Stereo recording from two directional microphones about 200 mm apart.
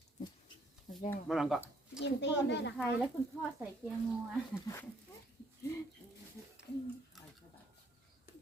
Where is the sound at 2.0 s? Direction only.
60° left (ahead or behind).